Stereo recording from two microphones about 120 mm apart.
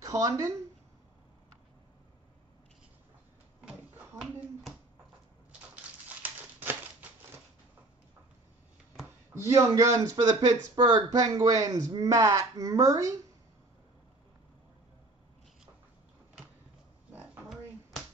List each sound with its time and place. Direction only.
0.0 s speech: 30° right (ahead or behind)
6.2 s a sound: 15° right (ahead or behind)
9.3 s speech: 25° right (ahead or behind)
17.1 s oink: 15° right (ahead or behind)